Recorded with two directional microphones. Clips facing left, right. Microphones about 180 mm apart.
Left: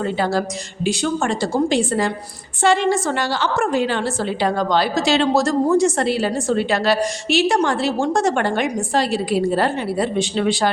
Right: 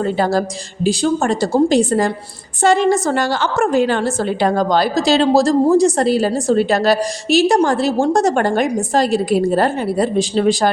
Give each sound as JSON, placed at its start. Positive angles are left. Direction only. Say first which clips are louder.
{"t": 0.0, "sound": "a woman's voice", "louder": "right 4 dB", "side_deg": -40}